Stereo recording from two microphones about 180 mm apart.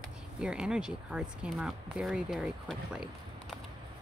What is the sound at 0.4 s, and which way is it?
Speech, 5° right (ahead or behind).